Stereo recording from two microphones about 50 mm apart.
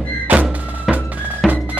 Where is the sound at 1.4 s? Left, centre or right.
Centre.